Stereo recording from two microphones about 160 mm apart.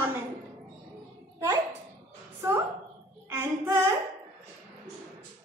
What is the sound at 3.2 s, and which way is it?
Speech, 15° right (ahead or behind).